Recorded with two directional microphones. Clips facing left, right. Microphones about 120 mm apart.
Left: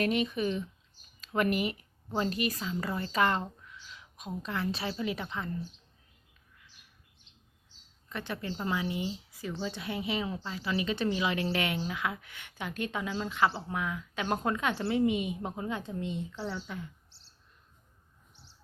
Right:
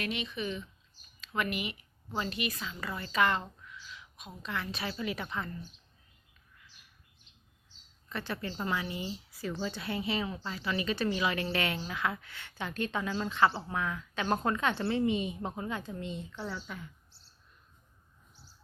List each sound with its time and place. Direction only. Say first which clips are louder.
0.0 s a woman's voice: left 7 dB; 45° left (ahead or behind)
3.8 s a sound: right 1 dB; 35° left (ahead or behind)
4.4 s speech: left 2 dB; 30° left (ahead or behind)
5.2 s speech: even; 10° left (ahead or behind)
8.1 s speech: even; 15° left (ahead or behind)